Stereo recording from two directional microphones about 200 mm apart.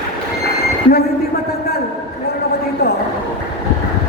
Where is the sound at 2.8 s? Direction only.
55° left (ahead or behind).